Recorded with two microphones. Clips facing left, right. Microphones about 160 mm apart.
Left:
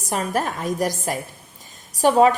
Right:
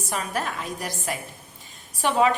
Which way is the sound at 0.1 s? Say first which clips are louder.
Left 6 dB; 40° left (ahead or behind).